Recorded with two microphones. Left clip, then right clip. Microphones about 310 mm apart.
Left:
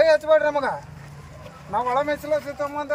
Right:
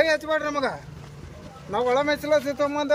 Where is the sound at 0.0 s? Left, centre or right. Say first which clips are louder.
Left 6 dB; centre.